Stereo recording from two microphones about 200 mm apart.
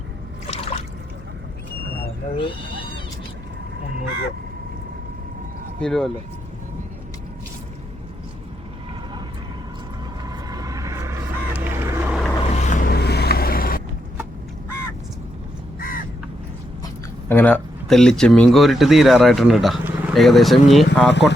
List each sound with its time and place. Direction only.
2.4 s speech: 25° left (ahead or behind)
5.8 s speech: 5° left (ahead or behind)
10.2 s vehicle: 20° right (ahead or behind)
12.4 s vehicle: 35° left (ahead or behind)
16.8 s speech: 10° left (ahead or behind)
21.1 s speech: 60° left (ahead or behind)